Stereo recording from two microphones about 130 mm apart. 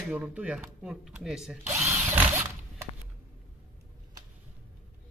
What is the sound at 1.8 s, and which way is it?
Drill, 20° right (ahead or behind).